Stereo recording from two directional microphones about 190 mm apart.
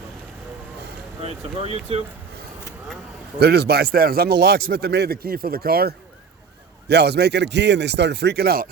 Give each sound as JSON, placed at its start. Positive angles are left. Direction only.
{"t": 1.2, "sound": "speech", "side_deg": -30}
{"t": 3.4, "sound": "a man's voice", "side_deg": -60}